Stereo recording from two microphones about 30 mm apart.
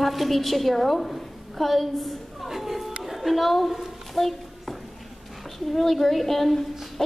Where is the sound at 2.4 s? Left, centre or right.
Centre.